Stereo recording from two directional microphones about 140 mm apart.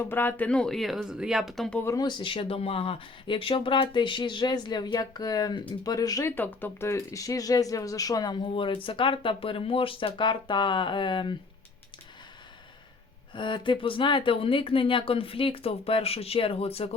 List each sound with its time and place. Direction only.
0.0 s speech: 15° left (ahead or behind)
1.8 s speech: 20° left (ahead or behind)
2.0 s speech: 35° left (ahead or behind)
6.3 s speech: 15° left (ahead or behind); by 11.3 s 35° left (ahead or behind)
13.3 s speech: 35° left (ahead or behind)